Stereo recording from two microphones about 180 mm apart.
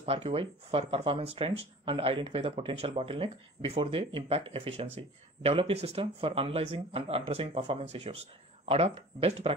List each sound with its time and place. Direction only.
0.0 s speech: 30° right (ahead or behind)